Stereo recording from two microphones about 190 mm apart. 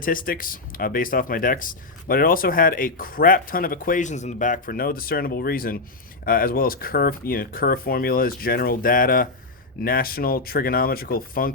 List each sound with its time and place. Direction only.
0.0 s speech: 45° left (ahead or behind)